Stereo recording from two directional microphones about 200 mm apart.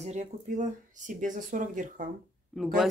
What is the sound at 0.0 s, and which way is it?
Speech, 35° right (ahead or behind).